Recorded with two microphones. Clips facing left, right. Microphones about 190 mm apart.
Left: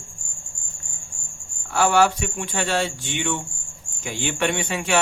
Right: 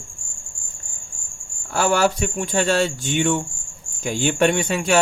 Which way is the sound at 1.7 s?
40° right (ahead or behind).